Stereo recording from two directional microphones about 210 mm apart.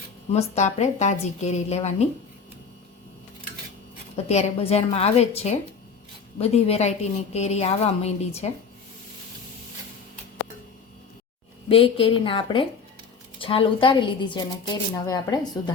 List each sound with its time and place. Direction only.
0.3 s a woman's voice: 30° left (ahead or behind)
4.1 s a woman's voice: 30° left (ahead or behind)
11.7 s speech: 25° left (ahead or behind)